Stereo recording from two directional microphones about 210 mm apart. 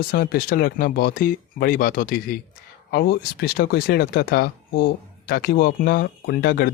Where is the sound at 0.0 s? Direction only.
45° left (ahead or behind).